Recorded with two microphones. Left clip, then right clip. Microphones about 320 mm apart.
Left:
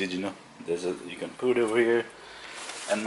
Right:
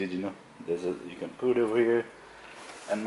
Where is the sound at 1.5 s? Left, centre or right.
Centre.